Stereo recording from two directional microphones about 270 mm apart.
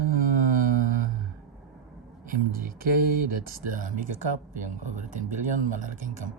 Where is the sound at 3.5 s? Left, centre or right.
Right.